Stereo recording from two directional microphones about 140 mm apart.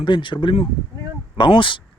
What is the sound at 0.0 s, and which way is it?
Speech, 35° left (ahead or behind).